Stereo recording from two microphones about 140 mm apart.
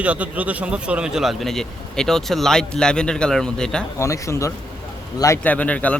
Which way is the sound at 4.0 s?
20° left (ahead or behind).